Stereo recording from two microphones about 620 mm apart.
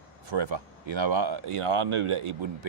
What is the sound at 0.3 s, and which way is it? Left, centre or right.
Speech, right.